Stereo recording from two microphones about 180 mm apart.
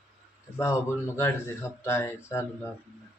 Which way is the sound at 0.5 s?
15° left (ahead or behind).